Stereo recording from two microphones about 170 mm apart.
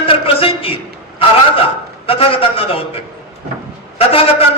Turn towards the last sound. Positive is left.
turn(degrees=35)  # may be behind; listen again after turning